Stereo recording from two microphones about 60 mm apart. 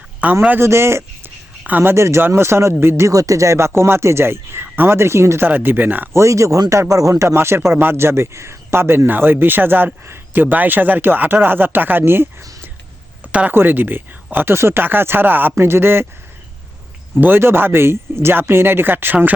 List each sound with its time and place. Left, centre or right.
0.2 s a man's voice: right
0.6 s a man's voice: right
3.1 s speech: right
3.7 s a man's voice: right
4.9 s a man's voice: right
5.5 s speech: right
6.1 s speech: right
7.3 s speech: right
13.5 s speech: right
17.2 s speech: right